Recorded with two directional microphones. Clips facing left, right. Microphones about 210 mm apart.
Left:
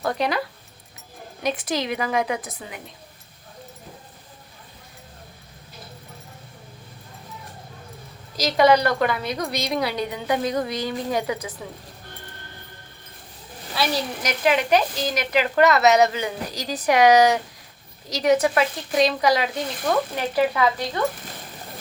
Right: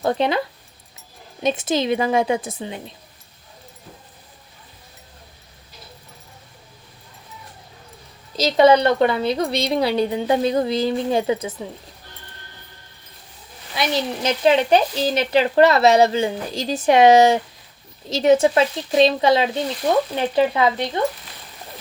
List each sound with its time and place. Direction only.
0.0 s a woman's voice: 25° right (ahead or behind)
8.4 s a woman's voice: 25° right (ahead or behind)
13.7 s a woman's voice: 20° right (ahead or behind)